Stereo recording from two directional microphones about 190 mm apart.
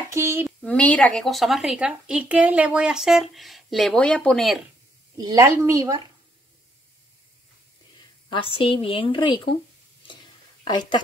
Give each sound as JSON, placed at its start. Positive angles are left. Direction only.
{"t": 0.1, "sound": "a woman's voice", "side_deg": -15}
{"t": 0.6, "sound": "speech", "side_deg": 5}
{"t": 5.1, "sound": "a woman's voice", "side_deg": -15}
{"t": 8.3, "sound": "a woman's voice", "side_deg": 25}
{"t": 10.6, "sound": "speech", "side_deg": 25}